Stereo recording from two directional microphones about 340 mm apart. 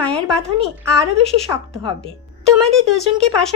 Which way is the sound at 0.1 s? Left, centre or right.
Centre.